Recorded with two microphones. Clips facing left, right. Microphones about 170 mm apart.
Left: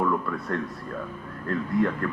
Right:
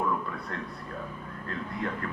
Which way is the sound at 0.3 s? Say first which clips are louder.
Left 7 dB; 50° left (ahead or behind).